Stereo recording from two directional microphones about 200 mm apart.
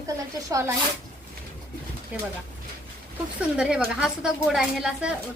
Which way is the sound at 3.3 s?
5° right (ahead or behind).